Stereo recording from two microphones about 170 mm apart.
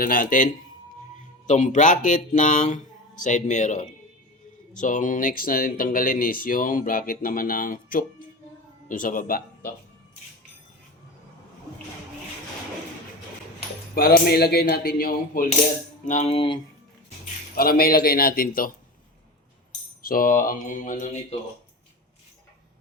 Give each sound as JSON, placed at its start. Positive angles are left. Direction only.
{"t": 0.0, "sound": "speech", "side_deg": 55}
{"t": 13.9, "sound": "speech", "side_deg": 65}
{"t": 16.0, "sound": "typing", "side_deg": 40}
{"t": 17.5, "sound": "speech", "side_deg": 60}
{"t": 20.1, "sound": "speech", "side_deg": 55}